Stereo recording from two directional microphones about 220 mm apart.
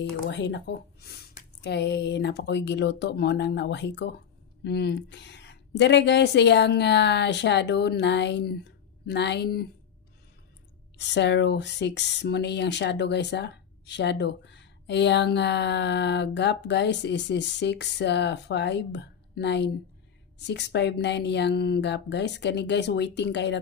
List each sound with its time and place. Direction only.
0.3 s speech: 55° left (ahead or behind)
11.0 s speech: 50° left (ahead or behind)